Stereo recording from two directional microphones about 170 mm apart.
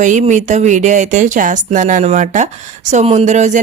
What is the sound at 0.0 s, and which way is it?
A woman's voice, 45° right (ahead or behind).